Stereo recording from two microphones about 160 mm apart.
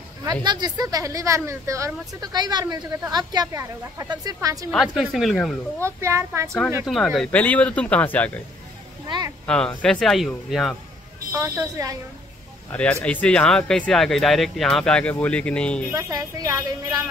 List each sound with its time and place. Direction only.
0.2 s speech: 25° right (ahead or behind)
4.6 s speech: centre (ahead or behind)
5.8 s a child's voice: 15° right (ahead or behind)
6.9 s speech: centre (ahead or behind)
9.0 s a sound: 25° right (ahead or behind)
9.5 s speech: 5° left (ahead or behind)
11.3 s speech: 15° right (ahead or behind)
12.7 s speech: 10° left (ahead or behind)
15.9 s speech: 20° right (ahead or behind)